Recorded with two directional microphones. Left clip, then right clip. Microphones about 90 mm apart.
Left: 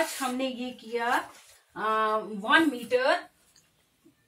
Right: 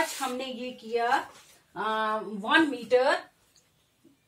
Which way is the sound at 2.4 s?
20° right (ahead or behind).